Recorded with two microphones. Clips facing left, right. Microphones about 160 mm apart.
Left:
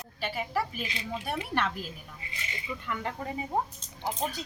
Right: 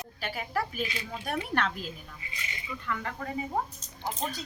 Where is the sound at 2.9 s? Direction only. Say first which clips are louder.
Right 2 dB; 25° left (ahead or behind).